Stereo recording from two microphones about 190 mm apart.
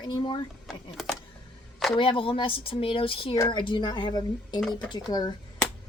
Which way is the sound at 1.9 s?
25° left (ahead or behind).